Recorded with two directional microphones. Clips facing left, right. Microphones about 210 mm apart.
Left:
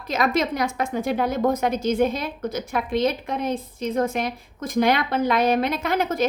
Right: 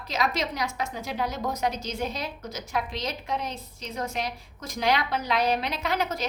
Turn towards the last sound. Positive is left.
turn(degrees=50)  # may be behind; listen again after turning